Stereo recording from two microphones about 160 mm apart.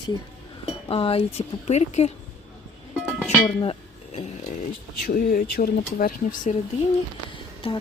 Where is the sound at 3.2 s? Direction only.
15° left (ahead or behind).